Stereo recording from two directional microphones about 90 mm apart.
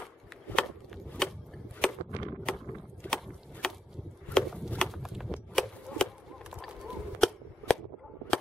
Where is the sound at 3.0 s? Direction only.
20° left (ahead or behind).